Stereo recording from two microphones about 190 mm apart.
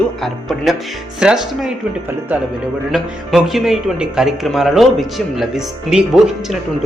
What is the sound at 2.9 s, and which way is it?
Speech, centre (ahead or behind).